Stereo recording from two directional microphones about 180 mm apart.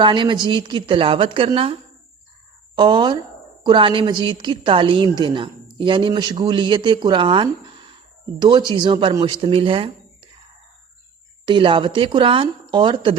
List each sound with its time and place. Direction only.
0.0 s speech: 25° right (ahead or behind)
11.4 s speech: 25° right (ahead or behind)